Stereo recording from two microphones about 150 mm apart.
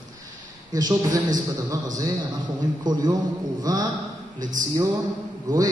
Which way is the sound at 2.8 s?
25° right (ahead or behind).